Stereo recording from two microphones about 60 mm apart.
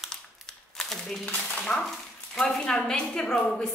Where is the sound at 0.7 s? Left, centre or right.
Centre.